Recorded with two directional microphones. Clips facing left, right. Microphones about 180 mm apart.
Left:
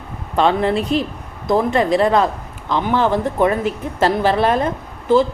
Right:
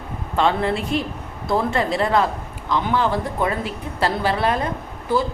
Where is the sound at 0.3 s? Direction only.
20° left (ahead or behind).